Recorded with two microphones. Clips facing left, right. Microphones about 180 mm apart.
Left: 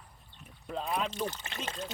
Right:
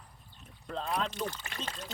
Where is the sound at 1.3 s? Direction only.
20° left (ahead or behind).